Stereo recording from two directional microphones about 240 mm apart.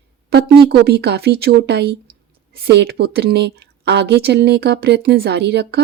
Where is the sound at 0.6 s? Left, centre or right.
Right.